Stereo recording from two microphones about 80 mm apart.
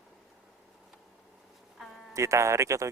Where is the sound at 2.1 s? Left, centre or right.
Right.